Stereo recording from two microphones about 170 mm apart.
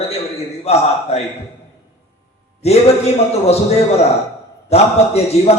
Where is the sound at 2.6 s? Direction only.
40° left (ahead or behind).